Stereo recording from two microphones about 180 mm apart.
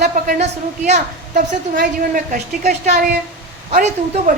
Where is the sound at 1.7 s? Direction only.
70° right (ahead or behind).